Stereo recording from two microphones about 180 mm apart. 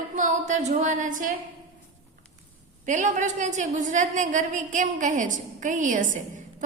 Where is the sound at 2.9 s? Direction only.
45° right (ahead or behind).